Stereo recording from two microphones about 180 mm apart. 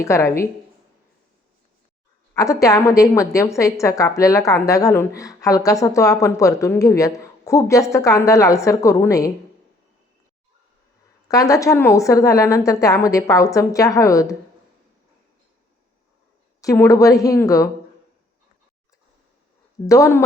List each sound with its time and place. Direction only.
0.0 s a woman's voice: 15° left (ahead or behind)
2.3 s a woman's voice: 20° left (ahead or behind)
11.3 s a woman's voice: 20° left (ahead or behind)
16.6 s a woman's voice: 20° left (ahead or behind)
19.9 s a woman's voice: 15° left (ahead or behind)